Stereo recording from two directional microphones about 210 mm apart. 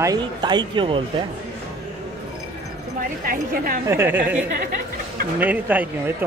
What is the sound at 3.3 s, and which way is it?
Speech, 40° right (ahead or behind).